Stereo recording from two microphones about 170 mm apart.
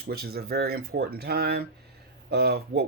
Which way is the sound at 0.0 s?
65° right (ahead or behind).